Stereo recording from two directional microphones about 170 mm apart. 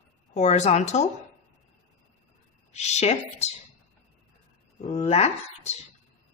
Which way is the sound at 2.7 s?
40° left (ahead or behind).